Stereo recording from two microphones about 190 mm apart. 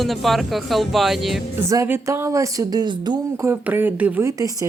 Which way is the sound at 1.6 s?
15° right (ahead or behind).